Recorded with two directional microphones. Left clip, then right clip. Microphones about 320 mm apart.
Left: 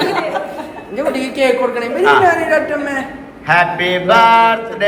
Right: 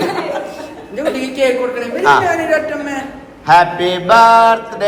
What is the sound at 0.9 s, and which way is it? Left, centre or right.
A woman's voice, centre.